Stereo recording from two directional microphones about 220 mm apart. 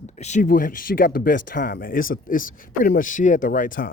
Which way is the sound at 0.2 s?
35° left (ahead or behind).